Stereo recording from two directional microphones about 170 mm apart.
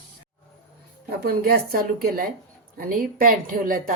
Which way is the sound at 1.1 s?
65° right (ahead or behind).